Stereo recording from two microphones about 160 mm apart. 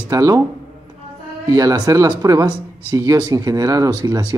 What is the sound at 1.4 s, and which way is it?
Speech, 20° right (ahead or behind).